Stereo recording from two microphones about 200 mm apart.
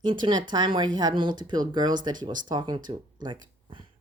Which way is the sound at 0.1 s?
25° right (ahead or behind).